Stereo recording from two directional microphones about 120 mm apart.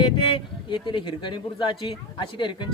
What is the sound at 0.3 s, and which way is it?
Speech, 45° left (ahead or behind).